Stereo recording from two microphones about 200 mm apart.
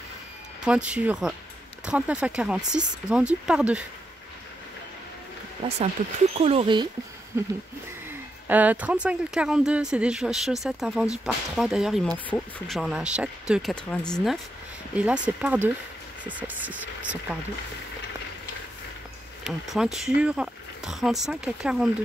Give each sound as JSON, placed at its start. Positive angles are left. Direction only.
{"t": 0.7, "sound": "speech", "side_deg": -5}
{"t": 5.6, "sound": "speech", "side_deg": -25}
{"t": 7.3, "sound": "speech", "side_deg": -10}
{"t": 19.4, "sound": "speech", "side_deg": 0}